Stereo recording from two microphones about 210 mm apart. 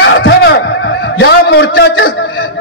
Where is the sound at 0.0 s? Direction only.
60° left (ahead or behind).